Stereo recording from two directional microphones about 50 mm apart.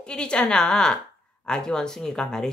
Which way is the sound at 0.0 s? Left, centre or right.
Centre.